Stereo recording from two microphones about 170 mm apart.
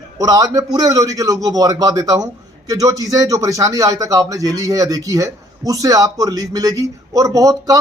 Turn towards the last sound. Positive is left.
turn(degrees=-20)  # may be behind; listen again after turning